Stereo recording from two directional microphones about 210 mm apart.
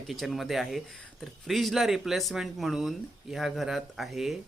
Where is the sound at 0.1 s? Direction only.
Centre (ahead or behind).